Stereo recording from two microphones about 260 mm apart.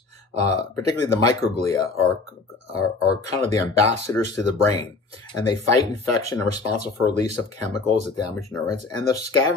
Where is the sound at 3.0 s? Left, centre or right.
Centre.